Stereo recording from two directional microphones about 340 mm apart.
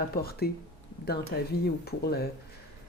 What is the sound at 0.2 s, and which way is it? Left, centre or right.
Speech, left.